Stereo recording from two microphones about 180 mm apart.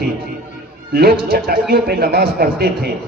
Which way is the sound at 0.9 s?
55° right (ahead or behind).